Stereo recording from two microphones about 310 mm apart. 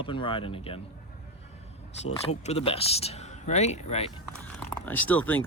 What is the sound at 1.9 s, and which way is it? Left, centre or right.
Speech, left.